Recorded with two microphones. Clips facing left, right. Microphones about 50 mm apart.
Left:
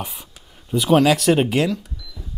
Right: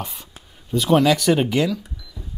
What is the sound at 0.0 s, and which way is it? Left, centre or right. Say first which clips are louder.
Speech: left 1 dB; centre.